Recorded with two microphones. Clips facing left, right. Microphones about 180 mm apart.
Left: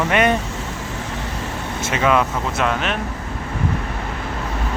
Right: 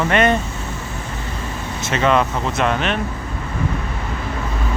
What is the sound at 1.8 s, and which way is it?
Speech, 5° left (ahead or behind).